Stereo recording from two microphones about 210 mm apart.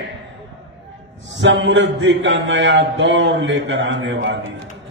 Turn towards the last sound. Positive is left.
turn(degrees=-60)  # may be behind; listen again after turning